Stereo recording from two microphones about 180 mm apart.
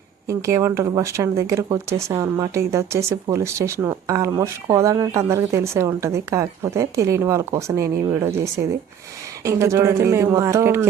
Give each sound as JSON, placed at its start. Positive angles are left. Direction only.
{"t": 0.3, "sound": "speech", "side_deg": -15}